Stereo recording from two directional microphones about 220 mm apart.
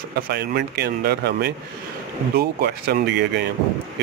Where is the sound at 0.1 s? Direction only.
50° right (ahead or behind).